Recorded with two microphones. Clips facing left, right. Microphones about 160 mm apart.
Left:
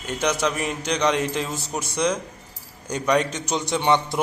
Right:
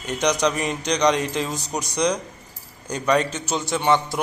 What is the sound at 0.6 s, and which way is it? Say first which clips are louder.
Speech: right 2 dB; 10° left (ahead or behind).